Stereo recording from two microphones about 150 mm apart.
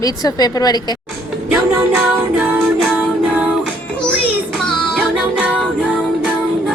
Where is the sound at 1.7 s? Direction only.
15° right (ahead or behind).